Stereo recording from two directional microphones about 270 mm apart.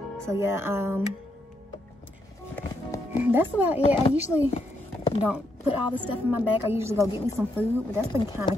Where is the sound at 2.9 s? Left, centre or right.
Centre.